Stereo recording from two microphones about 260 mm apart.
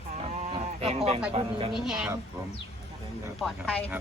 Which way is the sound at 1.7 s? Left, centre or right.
Centre.